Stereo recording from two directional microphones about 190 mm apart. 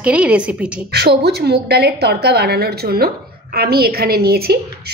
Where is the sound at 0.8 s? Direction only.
55° right (ahead or behind).